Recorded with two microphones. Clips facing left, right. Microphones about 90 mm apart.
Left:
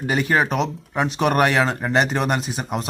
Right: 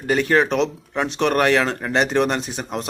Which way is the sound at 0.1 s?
5° left (ahead or behind).